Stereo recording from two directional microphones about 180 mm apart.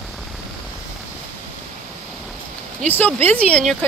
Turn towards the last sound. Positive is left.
turn(degrees=5)  # may be behind; listen again after turning